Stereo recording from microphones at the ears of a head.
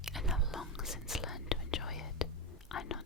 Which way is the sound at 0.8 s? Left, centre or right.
Left.